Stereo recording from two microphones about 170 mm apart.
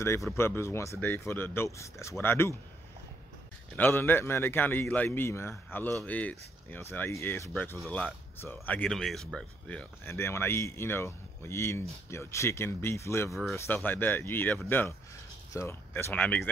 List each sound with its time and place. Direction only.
0.4 s speech: 15° left (ahead or behind)
3.7 s speech: 10° left (ahead or behind)
13.3 s speech: centre (ahead or behind)
13.6 s speech: 15° left (ahead or behind)